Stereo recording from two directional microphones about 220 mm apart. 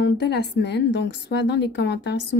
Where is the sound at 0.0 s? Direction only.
50° left (ahead or behind).